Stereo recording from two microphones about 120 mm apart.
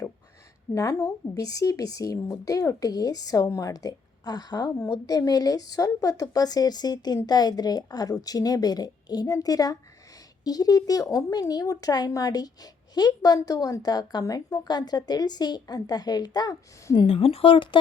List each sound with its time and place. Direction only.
0.7 s speech: 25° left (ahead or behind)
17.1 s speech: 50° left (ahead or behind)